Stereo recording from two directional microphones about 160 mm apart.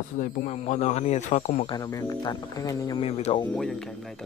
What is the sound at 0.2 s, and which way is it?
Speech, 50° left (ahead or behind).